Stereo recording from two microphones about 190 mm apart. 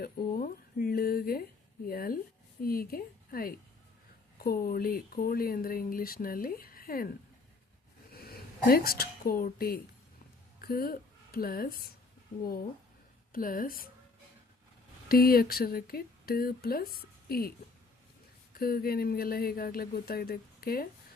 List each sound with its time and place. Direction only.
0.0 s a woman's voice: 50° left (ahead or behind)
8.1 s a woman's voice: 55° left (ahead or behind)
13.3 s speech: 45° left (ahead or behind)
15.1 s speech: 50° left (ahead or behind)
18.6 s speech: 55° left (ahead or behind)